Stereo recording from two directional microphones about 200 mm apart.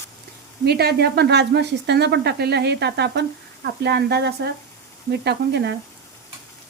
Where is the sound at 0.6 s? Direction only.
55° right (ahead or behind).